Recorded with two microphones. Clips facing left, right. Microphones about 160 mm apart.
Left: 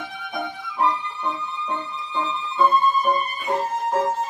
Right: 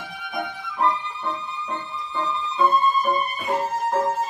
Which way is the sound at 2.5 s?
Centre (ahead or behind).